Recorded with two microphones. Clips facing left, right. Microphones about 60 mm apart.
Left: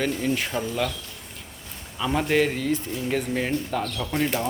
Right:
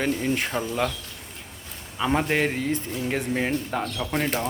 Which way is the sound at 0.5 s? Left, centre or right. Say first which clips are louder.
Even; right.